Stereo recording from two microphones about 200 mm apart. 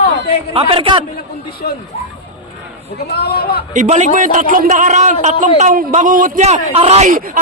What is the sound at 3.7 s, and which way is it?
A man's voice, 40° right (ahead or behind).